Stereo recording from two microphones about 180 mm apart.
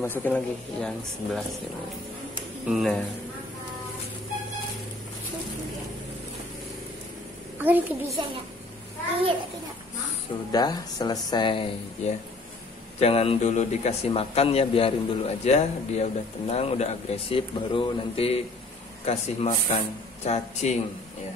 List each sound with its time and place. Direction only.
0.0 s speech: 10° left (ahead or behind)
2.7 s a man's voice: centre (ahead or behind)
7.5 s a child's voice: 10° right (ahead or behind)
10.5 s speech: 20° left (ahead or behind)
12.0 s a man's voice: 40° left (ahead or behind)